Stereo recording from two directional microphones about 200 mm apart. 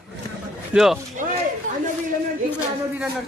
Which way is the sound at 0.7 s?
Centre (ahead or behind).